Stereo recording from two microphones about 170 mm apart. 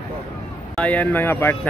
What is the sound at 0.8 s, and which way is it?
Speech, 10° left (ahead or behind).